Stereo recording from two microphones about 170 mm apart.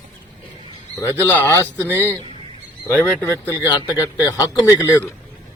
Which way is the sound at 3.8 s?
25° left (ahead or behind).